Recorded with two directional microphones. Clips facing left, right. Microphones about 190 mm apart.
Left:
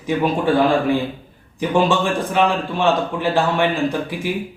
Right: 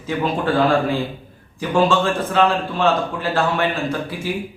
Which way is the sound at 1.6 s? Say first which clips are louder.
Even; 15° left (ahead or behind).